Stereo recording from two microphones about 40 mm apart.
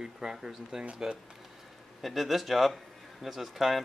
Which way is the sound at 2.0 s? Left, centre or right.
Centre.